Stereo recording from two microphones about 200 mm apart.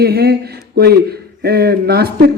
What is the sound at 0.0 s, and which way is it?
A man's voice, 50° right (ahead or behind).